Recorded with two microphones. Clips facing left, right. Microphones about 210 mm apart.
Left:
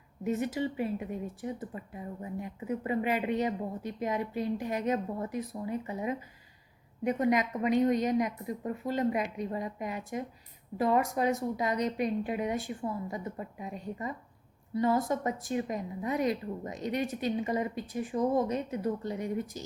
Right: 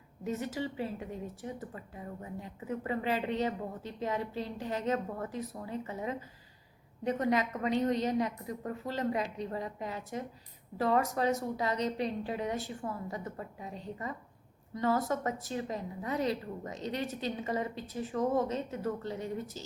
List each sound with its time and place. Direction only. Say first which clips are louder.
0.3 s a woman's voice: left 4 dB; 15° left (ahead or behind)